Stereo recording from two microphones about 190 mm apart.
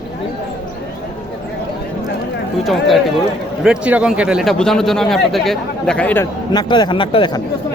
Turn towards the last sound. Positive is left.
turn(degrees=25)  # may be behind; listen again after turning